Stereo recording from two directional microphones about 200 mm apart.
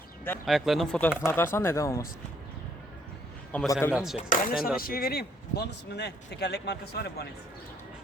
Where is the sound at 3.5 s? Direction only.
5° left (ahead or behind).